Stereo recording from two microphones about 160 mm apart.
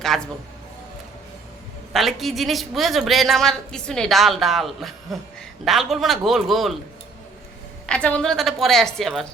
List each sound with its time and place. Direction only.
0.1 s speech: centre (ahead or behind)
1.9 s speech: centre (ahead or behind)
7.9 s speech: 10° left (ahead or behind)